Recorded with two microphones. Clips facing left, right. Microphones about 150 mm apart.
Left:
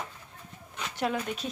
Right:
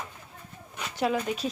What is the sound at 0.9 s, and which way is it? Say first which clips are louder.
Speech: right 4 dB; 5° right (ahead or behind).